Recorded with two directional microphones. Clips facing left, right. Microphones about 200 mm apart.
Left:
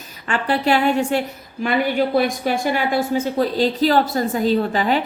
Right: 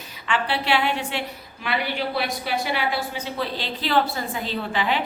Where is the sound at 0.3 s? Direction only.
45° left (ahead or behind).